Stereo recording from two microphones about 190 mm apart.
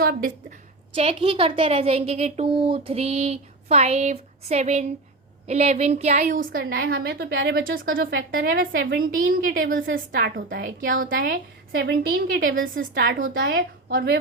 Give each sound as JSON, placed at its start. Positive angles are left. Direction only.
{"t": 0.0, "sound": "a woman's voice", "side_deg": -50}
{"t": 0.9, "sound": "a woman's voice", "side_deg": -30}
{"t": 8.7, "sound": "a woman's voice", "side_deg": -60}
{"t": 12.7, "sound": "a woman's voice", "side_deg": -70}